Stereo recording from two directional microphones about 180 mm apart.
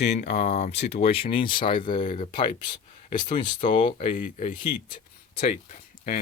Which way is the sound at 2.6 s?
25° left (ahead or behind).